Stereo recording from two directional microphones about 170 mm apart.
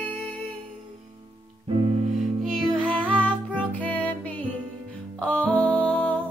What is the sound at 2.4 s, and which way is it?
Music, centre (ahead or behind).